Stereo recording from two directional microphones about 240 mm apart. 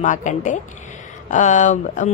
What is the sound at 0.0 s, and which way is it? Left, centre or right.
A woman's voice, left.